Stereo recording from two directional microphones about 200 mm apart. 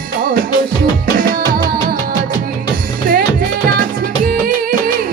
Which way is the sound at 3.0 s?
45° right (ahead or behind).